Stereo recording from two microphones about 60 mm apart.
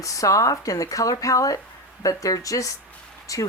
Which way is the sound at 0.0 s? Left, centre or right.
Left.